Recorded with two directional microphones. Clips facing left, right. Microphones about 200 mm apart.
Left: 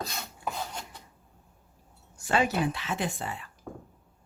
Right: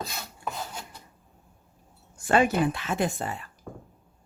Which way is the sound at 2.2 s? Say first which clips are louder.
Right 4 dB; 50° right (ahead or behind).